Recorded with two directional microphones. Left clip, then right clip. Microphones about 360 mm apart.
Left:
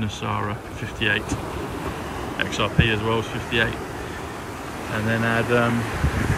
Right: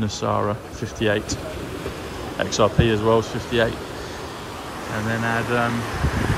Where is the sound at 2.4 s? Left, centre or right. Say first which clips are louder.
Right 4 dB; centre.